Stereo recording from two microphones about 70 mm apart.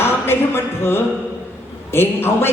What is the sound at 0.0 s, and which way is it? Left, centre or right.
A man's voice, left.